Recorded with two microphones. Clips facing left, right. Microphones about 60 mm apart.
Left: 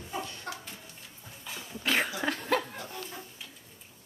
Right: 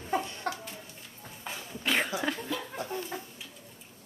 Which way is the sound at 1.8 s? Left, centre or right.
Centre.